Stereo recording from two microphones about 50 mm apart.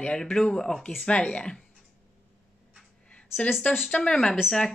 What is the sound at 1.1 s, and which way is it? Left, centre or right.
Speech, left.